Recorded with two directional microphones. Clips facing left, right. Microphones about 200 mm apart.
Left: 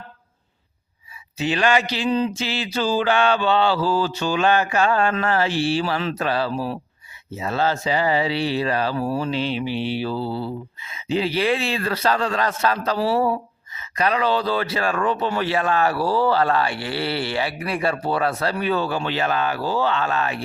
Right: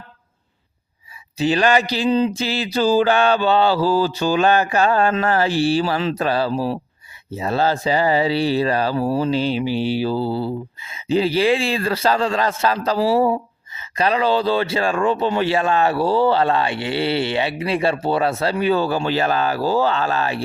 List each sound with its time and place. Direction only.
1.4 s speech: 35° right (ahead or behind)